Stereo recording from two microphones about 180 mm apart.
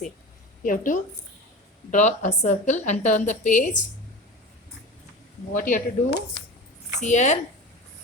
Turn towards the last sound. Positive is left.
turn(degrees=40)  # may be behind; listen again after turning